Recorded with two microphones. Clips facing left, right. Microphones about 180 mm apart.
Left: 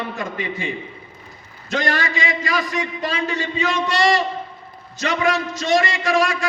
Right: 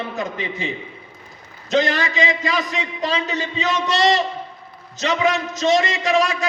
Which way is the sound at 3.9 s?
20° right (ahead or behind).